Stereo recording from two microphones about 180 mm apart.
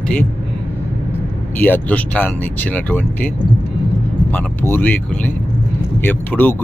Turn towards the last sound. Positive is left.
turn(degrees=10)  # may be behind; listen again after turning